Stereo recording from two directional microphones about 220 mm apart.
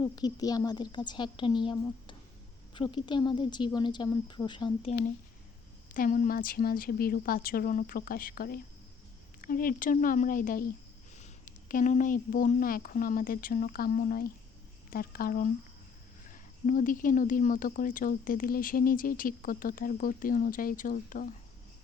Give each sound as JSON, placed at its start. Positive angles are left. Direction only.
{"t": 0.0, "sound": "a woman's voice", "side_deg": 15}